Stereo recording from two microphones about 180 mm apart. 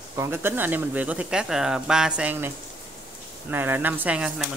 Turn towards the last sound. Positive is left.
turn(degrees=-5)  # may be behind; listen again after turning